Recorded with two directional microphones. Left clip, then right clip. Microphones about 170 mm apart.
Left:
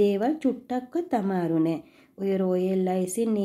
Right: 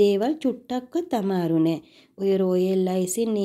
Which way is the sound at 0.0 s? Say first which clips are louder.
Right 3 dB; 30° right (ahead or behind).